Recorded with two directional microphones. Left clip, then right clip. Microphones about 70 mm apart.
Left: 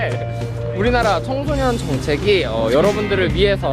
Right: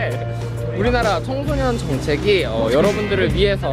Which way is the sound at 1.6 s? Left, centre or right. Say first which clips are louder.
Left 1 dB; centre.